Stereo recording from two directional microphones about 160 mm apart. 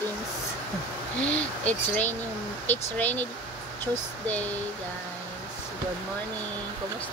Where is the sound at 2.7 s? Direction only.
10° left (ahead or behind).